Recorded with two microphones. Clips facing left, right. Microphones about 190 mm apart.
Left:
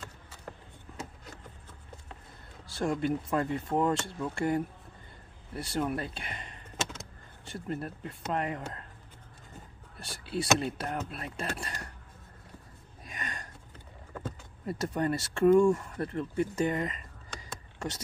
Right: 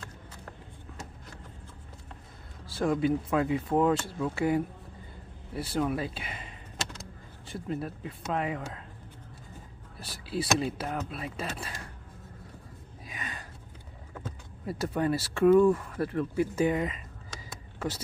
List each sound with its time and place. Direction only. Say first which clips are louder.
2.7 s speech: right 3 dB; centre (ahead or behind)
9.9 s speech: right 1 dB; centre (ahead or behind)
13.0 s a sound: even; centre (ahead or behind)
14.1 s speech: left 2 dB; centre (ahead or behind)
17.5 s vehicle: right 3 dB; 5° right (ahead or behind)